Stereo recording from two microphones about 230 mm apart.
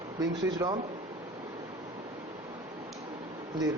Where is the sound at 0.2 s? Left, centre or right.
Centre.